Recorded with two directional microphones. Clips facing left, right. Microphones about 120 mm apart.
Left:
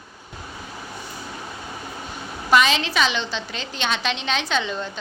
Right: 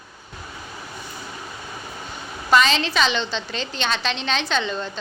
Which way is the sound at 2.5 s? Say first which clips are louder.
Even; 10° left (ahead or behind).